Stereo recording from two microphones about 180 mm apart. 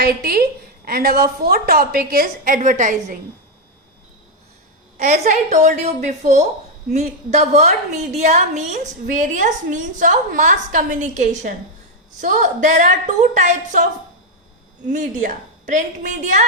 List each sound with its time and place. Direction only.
0.0 s a woman's voice: 55° right (ahead or behind)
4.9 s a woman's voice: 40° right (ahead or behind)
14.8 s a woman's voice: 45° right (ahead or behind)